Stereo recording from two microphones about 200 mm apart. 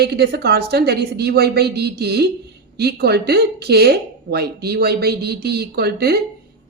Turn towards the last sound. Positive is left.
turn(degrees=-50)  # may be behind; listen again after turning